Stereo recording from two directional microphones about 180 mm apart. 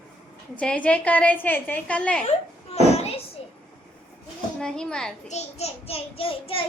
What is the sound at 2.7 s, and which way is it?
Children playing, 35° left (ahead or behind).